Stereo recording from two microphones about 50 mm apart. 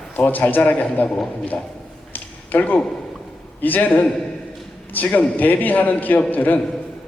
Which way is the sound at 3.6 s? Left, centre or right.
Left.